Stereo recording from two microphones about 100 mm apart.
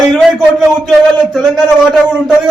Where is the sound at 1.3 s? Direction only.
Centre (ahead or behind).